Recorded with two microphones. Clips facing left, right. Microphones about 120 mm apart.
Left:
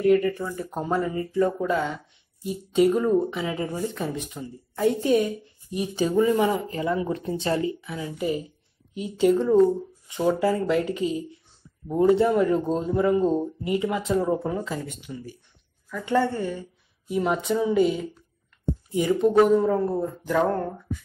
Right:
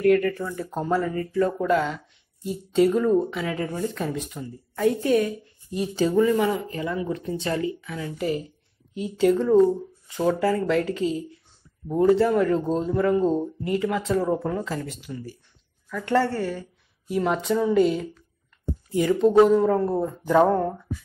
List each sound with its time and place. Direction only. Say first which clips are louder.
0.0 s speech: even; 15° left (ahead or behind)
7.9 s speech: even; 15° left (ahead or behind)
12.4 s speech: even; 10° left (ahead or behind)
15.9 s speech: right 1 dB; 15° left (ahead or behind)
20.1 s a sound: right 5 dB; 15° right (ahead or behind)
20.4 s speech: right 4 dB; 5° right (ahead or behind)